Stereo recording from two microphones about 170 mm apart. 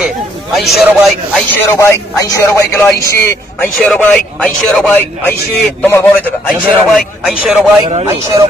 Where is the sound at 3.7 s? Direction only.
5° left (ahead or behind).